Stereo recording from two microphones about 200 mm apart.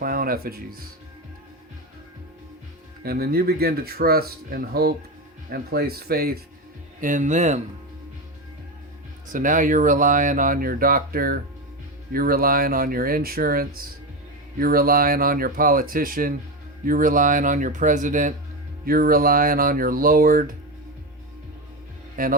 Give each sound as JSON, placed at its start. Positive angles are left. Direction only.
{"t": 0.0, "sound": "speech", "side_deg": -45}
{"t": 3.0, "sound": "speech", "side_deg": -50}
{"t": 9.3, "sound": "speech", "side_deg": -40}
{"t": 22.1, "sound": "speech", "side_deg": -45}